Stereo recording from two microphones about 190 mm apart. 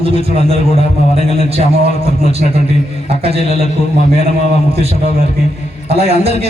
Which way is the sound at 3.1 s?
30° right (ahead or behind).